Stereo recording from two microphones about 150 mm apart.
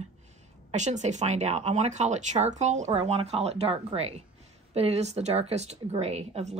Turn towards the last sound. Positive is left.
turn(degrees=-45)  # may be behind; listen again after turning